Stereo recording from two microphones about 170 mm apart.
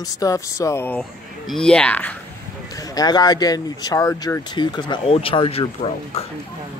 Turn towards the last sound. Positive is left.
turn(degrees=35)  # may be behind; listen again after turning